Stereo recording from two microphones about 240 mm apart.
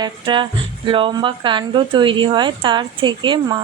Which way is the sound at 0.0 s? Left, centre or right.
Right.